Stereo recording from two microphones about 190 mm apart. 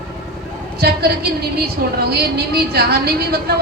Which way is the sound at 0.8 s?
55° right (ahead or behind).